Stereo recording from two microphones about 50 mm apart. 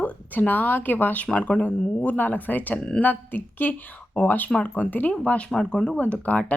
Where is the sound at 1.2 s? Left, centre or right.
Left.